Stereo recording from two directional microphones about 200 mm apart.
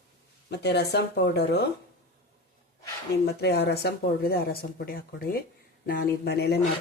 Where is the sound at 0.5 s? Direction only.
55° left (ahead or behind).